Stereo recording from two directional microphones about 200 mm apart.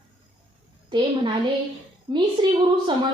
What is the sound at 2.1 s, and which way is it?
Speech, 20° right (ahead or behind).